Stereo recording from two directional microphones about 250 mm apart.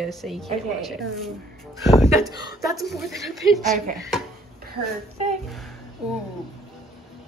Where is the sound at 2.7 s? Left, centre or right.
Centre.